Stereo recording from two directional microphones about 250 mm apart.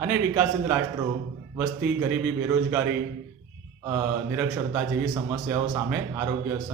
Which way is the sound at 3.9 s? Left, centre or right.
Centre.